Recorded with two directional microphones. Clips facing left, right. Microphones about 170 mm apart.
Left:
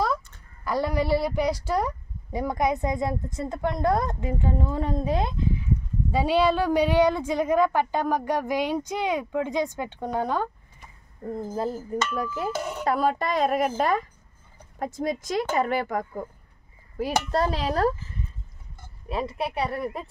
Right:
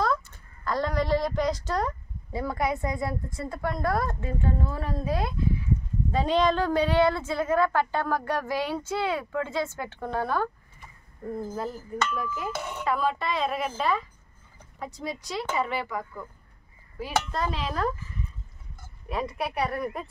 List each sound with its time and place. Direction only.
0.7 s a woman's voice: 10° left (ahead or behind)
6.1 s a woman's voice: 10° left (ahead or behind); by 11.8 s 25° left (ahead or behind)
12.1 s speech: 35° left (ahead or behind)
19.0 s a woman's voice: 25° left (ahead or behind)